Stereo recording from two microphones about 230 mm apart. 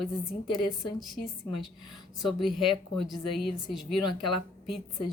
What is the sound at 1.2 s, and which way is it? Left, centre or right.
Speech, left.